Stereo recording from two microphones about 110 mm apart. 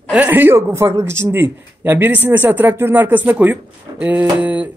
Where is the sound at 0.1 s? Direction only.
15° right (ahead or behind).